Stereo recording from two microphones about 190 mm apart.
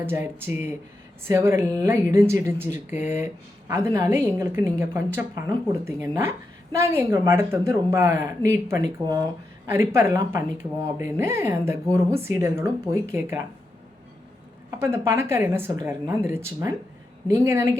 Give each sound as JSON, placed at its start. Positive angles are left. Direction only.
{"t": 0.0, "sound": "speech", "side_deg": -10}
{"t": 14.8, "sound": "speech", "side_deg": -15}